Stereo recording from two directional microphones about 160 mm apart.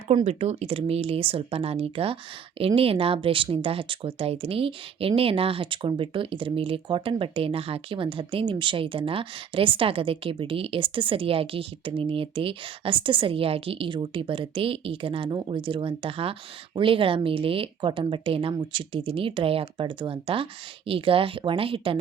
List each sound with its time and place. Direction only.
0.3 s speech: 40° right (ahead or behind)